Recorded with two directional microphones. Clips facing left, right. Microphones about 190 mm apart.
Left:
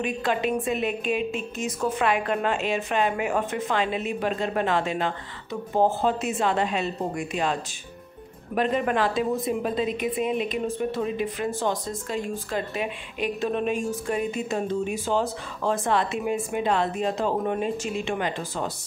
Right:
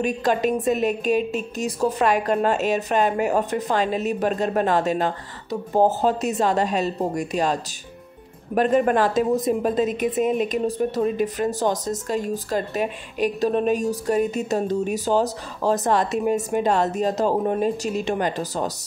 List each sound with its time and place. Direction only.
0.0 s a woman's voice: 40° right (ahead or behind)
8.5 s a woman's voice: 45° right (ahead or behind)